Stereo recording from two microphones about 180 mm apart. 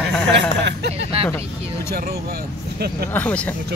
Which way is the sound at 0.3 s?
70° right (ahead or behind).